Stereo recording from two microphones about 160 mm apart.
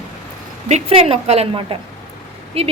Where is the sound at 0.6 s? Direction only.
40° right (ahead or behind).